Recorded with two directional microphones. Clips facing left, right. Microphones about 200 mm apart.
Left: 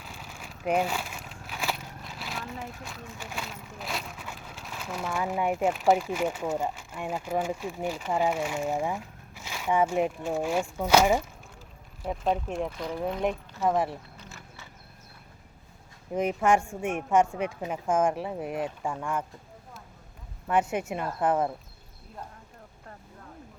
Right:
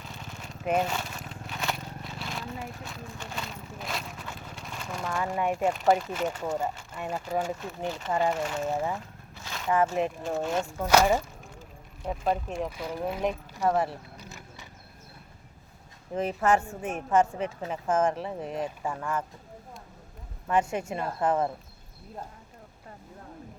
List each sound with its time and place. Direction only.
0.0 s a sound: 5° left (ahead or behind)
2.1 s a woman's voice: centre (ahead or behind)
12.0 s speech: 5° right (ahead or behind)
13.7 s a woman's voice: 10° left (ahead or behind)
14.2 s a sound: 15° right (ahead or behind)
16.1 s a woman's voice: 10° left (ahead or behind)
20.5 s speech: 5° left (ahead or behind)